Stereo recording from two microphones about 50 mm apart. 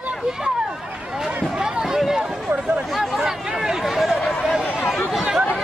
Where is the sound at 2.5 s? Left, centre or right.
Right.